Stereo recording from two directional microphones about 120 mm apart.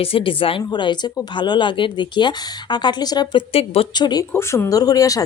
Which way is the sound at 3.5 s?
55° left (ahead or behind).